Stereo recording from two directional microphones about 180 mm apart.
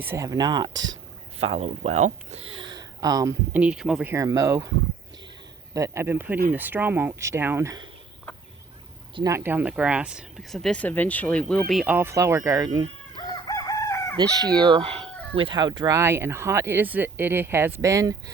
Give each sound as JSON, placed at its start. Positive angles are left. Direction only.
{"t": 0.0, "sound": "speech", "side_deg": -15}
{"t": 0.7, "sound": "speech", "side_deg": -90}
{"t": 1.4, "sound": "speech", "side_deg": -35}
{"t": 3.5, "sound": "speech", "side_deg": -5}
{"t": 4.1, "sound": "speech", "side_deg": -15}
{"t": 5.7, "sound": "speech", "side_deg": -15}
{"t": 9.1, "sound": "speech", "side_deg": -20}
{"t": 13.1, "sound": "crowing", "side_deg": 20}
{"t": 14.2, "sound": "speech", "side_deg": -20}